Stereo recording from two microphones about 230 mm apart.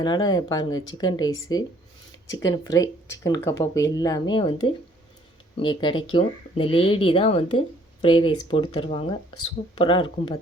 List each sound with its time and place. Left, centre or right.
0.0 s speech: centre